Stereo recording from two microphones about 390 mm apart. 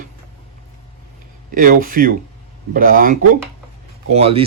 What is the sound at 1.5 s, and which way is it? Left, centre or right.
Speech, right.